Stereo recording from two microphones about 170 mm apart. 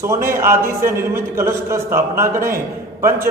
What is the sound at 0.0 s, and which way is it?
A man's voice, 15° right (ahead or behind).